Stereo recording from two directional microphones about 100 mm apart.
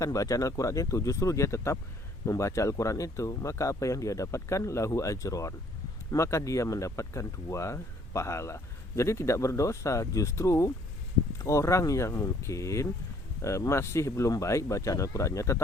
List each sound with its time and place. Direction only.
0.0 s speech: 35° left (ahead or behind)